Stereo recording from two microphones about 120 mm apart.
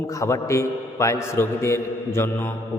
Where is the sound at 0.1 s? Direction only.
25° left (ahead or behind).